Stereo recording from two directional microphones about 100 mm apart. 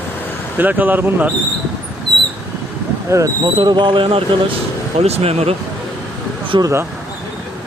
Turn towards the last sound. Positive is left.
turn(degrees=-30)  # may be behind; listen again after turning